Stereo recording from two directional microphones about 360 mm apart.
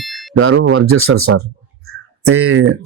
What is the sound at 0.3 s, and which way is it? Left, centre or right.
Speech, right.